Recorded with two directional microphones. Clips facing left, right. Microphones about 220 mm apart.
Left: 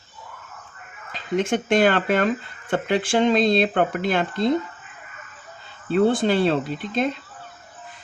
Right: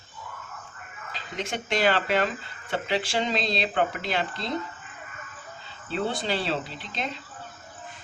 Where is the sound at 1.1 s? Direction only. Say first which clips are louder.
Left 11 dB; 50° left (ahead or behind).